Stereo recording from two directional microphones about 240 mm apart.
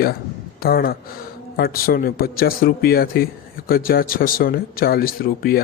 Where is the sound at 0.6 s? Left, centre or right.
Left.